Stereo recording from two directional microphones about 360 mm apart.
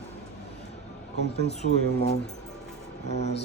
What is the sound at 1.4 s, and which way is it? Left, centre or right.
Speech, centre.